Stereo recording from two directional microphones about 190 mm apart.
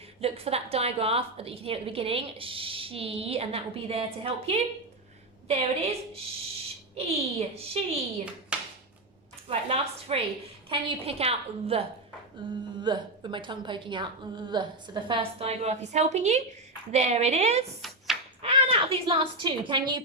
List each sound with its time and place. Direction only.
0.2 s a woman's voice: 30° right (ahead or behind)
8.5 s a sound: 5° right (ahead or behind)
9.5 s a woman's voice: 30° right (ahead or behind)